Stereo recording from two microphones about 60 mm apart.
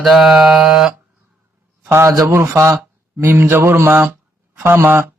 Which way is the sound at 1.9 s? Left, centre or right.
Right.